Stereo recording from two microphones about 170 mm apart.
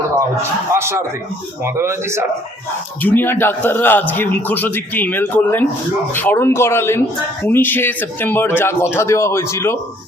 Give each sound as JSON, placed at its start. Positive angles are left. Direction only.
{"t": 0.8, "sound": "speech", "side_deg": -15}
{"t": 3.0, "sound": "a man's voice", "side_deg": 10}